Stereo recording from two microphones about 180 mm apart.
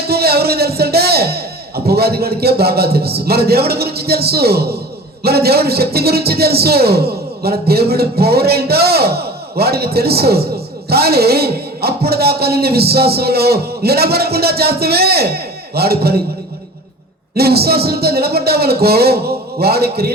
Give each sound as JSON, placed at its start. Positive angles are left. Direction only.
{"t": 0.1, "sound": "a man's voice", "side_deg": -60}
{"t": 17.3, "sound": "a man's voice", "side_deg": -60}